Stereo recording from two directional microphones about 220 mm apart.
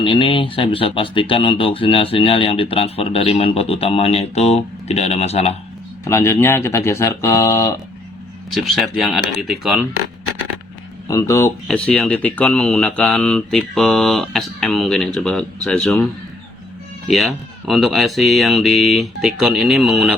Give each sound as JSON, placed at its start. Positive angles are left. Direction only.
{"t": 0.0, "sound": "speech", "side_deg": 20}
{"t": 6.1, "sound": "speech", "side_deg": 10}
{"t": 8.4, "sound": "speech", "side_deg": 0}
{"t": 11.1, "sound": "speech", "side_deg": 15}
{"t": 17.1, "sound": "speech", "side_deg": 0}